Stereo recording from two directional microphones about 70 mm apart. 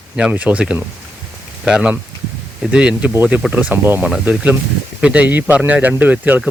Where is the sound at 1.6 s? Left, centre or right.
Centre.